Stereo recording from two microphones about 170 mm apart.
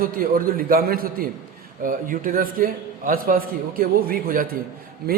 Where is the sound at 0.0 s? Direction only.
55° right (ahead or behind).